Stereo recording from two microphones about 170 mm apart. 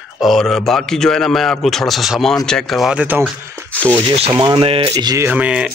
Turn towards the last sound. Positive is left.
turn(degrees=-5)  # may be behind; listen again after turning